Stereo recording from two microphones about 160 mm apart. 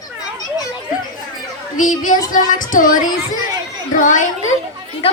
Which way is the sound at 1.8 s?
55° left (ahead or behind).